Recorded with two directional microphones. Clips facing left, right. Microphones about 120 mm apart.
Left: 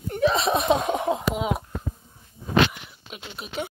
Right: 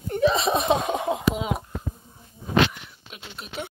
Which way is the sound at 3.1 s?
Centre (ahead or behind).